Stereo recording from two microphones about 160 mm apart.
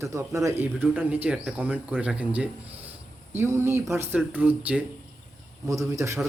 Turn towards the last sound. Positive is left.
turn(degrees=-20)  # may be behind; listen again after turning